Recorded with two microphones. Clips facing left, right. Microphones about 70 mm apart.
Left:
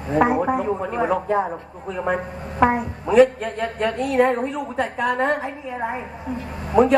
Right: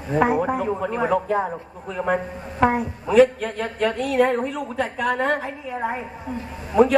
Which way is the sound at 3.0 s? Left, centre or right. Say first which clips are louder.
Left 1 dB; left.